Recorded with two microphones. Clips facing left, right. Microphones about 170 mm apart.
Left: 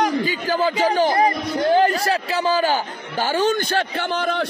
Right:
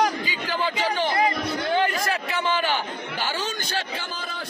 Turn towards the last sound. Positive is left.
turn(degrees=55)  # may be behind; listen again after turning